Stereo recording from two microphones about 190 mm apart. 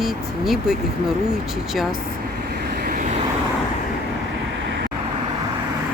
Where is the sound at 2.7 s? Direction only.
45° right (ahead or behind).